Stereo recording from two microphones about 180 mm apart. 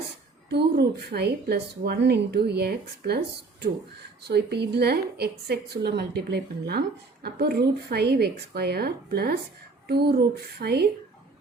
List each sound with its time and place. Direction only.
0.5 s a woman's voice: 60° right (ahead or behind)
4.2 s a woman's voice: 65° right (ahead or behind)